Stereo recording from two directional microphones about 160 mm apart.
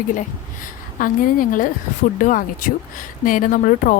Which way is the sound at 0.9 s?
60° left (ahead or behind).